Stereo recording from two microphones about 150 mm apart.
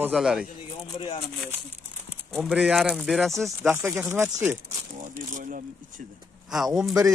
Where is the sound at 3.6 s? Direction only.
15° right (ahead or behind).